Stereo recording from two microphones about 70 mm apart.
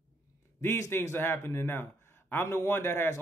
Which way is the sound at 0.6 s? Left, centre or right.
Left.